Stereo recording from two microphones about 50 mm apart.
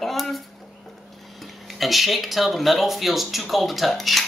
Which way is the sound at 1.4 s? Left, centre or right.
Centre.